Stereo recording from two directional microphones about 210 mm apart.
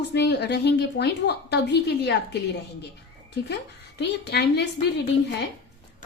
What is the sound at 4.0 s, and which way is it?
Speech, 50° left (ahead or behind).